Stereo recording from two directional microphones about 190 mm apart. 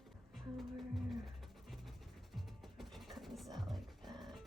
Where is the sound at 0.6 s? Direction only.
Centre (ahead or behind).